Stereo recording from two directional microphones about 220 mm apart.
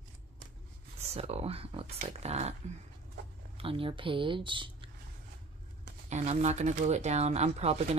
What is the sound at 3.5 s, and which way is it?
Speech, 25° right (ahead or behind).